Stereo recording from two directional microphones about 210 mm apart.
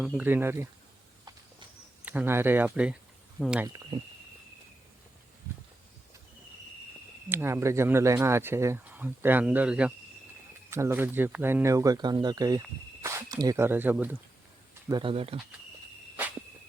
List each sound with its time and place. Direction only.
0.0 s speech: 5° right (ahead or behind)
2.0 s speech: 10° right (ahead or behind)
3.7 s speech: 20° right (ahead or behind)
7.3 s speech: 10° right (ahead or behind)
14.8 s speech: 25° right (ahead or behind)